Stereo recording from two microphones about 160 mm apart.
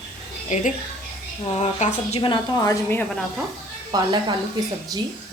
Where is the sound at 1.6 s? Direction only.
45° left (ahead or behind).